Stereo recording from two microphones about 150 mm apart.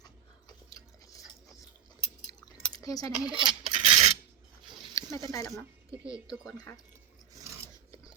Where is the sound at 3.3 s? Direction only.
35° right (ahead or behind).